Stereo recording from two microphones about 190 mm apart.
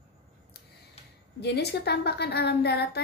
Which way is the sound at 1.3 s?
60° left (ahead or behind).